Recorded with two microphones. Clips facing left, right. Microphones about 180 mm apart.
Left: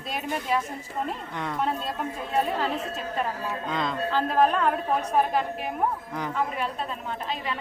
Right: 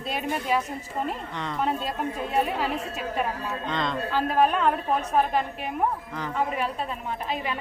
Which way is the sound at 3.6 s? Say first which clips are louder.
Right 1 dB; 5° left (ahead or behind).